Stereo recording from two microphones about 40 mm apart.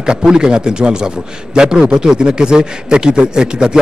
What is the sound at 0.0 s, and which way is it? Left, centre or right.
A man's voice, right.